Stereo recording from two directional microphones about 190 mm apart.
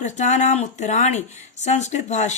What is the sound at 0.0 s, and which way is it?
Speech, 40° left (ahead or behind).